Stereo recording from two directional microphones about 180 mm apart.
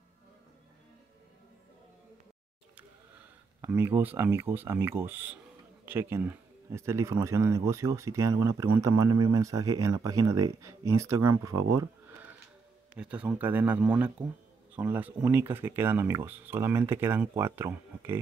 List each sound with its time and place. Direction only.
3.6 s speech: 15° right (ahead or behind)
13.0 s speech: 5° right (ahead or behind)